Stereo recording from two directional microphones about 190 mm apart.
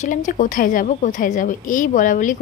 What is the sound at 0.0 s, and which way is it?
A woman's voice, 45° left (ahead or behind).